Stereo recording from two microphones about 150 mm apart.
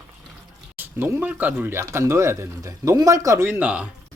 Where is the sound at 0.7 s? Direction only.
15° right (ahead or behind).